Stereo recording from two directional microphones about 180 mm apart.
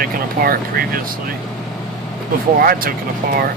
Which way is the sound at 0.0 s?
55° right (ahead or behind).